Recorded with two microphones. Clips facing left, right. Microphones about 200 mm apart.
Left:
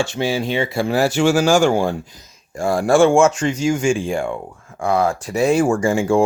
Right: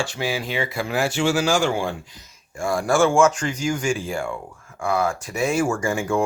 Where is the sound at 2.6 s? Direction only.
35° left (ahead or behind).